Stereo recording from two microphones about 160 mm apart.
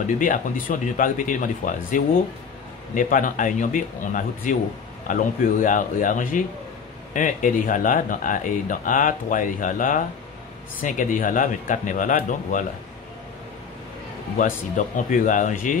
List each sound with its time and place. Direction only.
0.0 s speech: 60° left (ahead or behind)
14.4 s speech: 55° left (ahead or behind)